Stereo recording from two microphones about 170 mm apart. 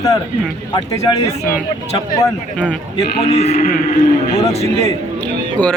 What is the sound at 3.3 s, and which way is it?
Speech, 40° left (ahead or behind).